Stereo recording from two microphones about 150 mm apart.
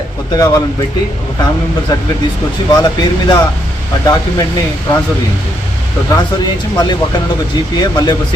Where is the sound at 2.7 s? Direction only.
30° left (ahead or behind).